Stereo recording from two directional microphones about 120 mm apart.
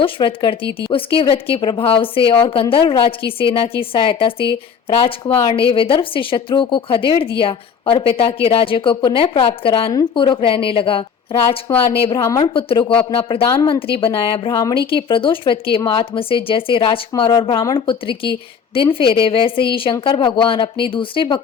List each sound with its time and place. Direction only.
0.0 s a woman's voice: 45° left (ahead or behind)
5.5 s a woman's voice: 50° left (ahead or behind)
9.9 s a woman's voice: 40° left (ahead or behind)
11.3 s a woman's voice: 25° left (ahead or behind)
12.4 s a woman's voice: 45° left (ahead or behind)